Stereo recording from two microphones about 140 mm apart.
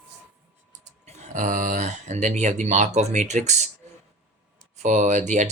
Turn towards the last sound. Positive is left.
turn(degrees=-60)  # may be behind; listen again after turning